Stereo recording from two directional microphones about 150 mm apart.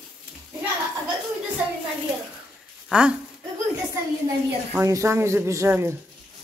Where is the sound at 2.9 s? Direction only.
5° right (ahead or behind).